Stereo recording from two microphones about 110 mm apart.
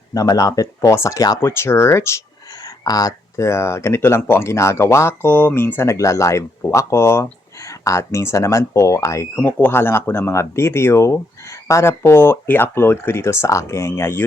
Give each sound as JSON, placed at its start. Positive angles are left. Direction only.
{"t": 0.1, "sound": "speech", "side_deg": 30}